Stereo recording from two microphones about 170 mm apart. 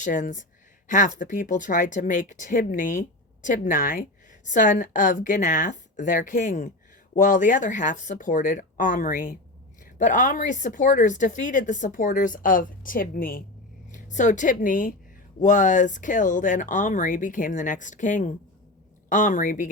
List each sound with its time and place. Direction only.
0.0 s speech: 50° left (ahead or behind)
13.9 s speech: 45° left (ahead or behind)